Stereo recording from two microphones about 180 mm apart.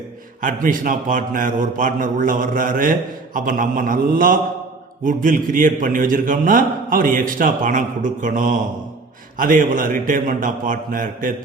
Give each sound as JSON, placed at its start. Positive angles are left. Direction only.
{"t": 0.4, "sound": "a man's voice", "side_deg": -50}